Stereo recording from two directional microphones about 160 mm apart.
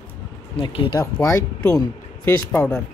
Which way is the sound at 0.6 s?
30° left (ahead or behind).